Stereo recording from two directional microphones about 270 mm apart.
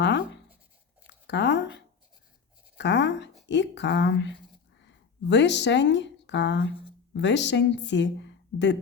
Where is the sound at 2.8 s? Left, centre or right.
Left.